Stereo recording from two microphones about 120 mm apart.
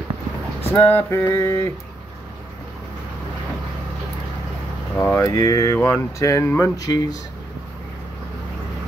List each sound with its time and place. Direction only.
0.7 s speech: 20° left (ahead or behind)
4.9 s speech: 15° left (ahead or behind)
5.2 s speech: 30° left (ahead or behind)